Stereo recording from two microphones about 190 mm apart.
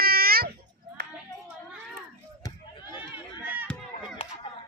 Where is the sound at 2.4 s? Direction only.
20° left (ahead or behind).